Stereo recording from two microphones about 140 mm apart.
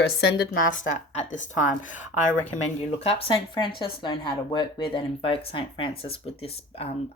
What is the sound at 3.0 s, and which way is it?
Speech, 40° left (ahead or behind).